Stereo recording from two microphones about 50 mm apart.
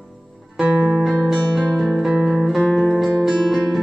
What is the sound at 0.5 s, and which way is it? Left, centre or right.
Music, right.